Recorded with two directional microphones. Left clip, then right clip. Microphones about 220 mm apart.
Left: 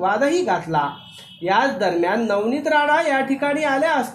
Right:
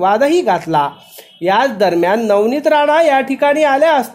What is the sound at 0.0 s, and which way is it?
A woman's voice, 45° right (ahead or behind).